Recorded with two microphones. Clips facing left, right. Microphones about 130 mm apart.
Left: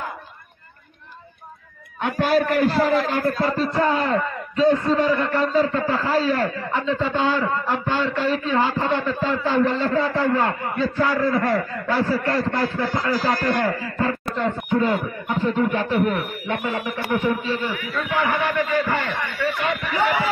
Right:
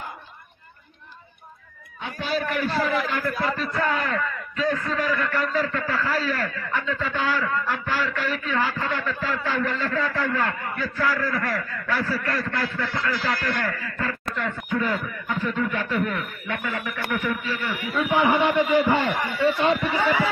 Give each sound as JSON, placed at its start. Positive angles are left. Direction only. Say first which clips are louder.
{"t": 2.1, "sound": "a man's voice", "louder": "left 7 dB", "side_deg": 50}
{"t": 2.7, "sound": "a man's voice", "louder": "left 5 dB", "side_deg": 30}
{"t": 17.9, "sound": "a man's voice", "louder": "right 3 dB", "side_deg": -10}
{"t": 18.2, "sound": "a man's voice", "louder": "right 2 dB", "side_deg": -20}